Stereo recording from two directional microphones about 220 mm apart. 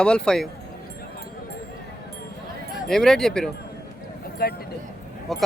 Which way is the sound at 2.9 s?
Centre (ahead or behind).